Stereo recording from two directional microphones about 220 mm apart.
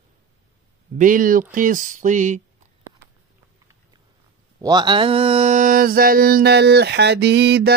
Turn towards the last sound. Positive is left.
turn(degrees=-50)  # may be behind; listen again after turning